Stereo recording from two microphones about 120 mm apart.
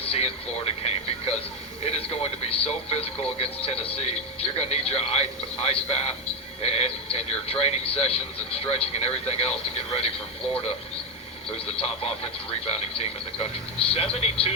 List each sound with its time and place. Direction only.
0.1 s radio: 55° left (ahead or behind)
1.8 s a man's voice: 55° left (ahead or behind)
11.5 s a man's voice: 55° left (ahead or behind)